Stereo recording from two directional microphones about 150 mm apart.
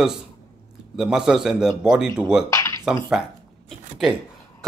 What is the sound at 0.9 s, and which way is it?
A man's voice, 5° right (ahead or behind).